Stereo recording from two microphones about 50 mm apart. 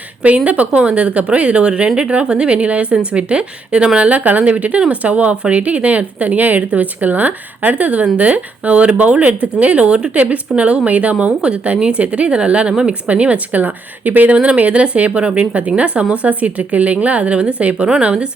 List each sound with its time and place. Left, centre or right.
0.2 s speech: right
14.3 s speech: right